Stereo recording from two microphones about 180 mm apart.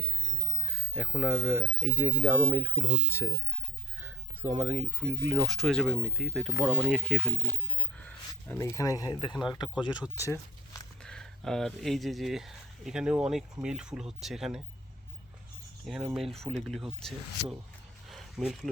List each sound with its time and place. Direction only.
0.0 s speech: 5° right (ahead or behind); by 9.4 s 25° left (ahead or behind)
10.0 s speech: 15° right (ahead or behind)
11.0 s speech: 5° left (ahead or behind)
15.9 s speech: centre (ahead or behind)
18.1 s a sound: centre (ahead or behind)